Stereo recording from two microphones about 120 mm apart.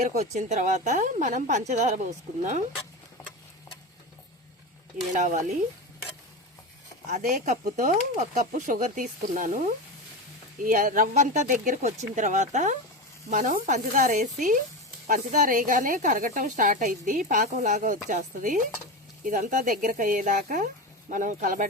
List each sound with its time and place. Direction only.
0.2 s a woman's voice: 70° right (ahead or behind)
5.1 s speech: 90° right
7.1 s speech: 90° right
13.3 s speech: 90° right